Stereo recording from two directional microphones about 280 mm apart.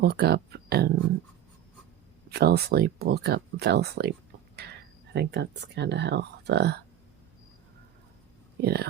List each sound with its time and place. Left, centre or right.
0.0 s speech: right
2.3 s speech: right
8.6 s speech: right